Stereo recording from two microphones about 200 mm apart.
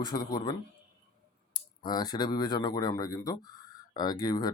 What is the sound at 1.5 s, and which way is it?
Speech, 20° left (ahead or behind).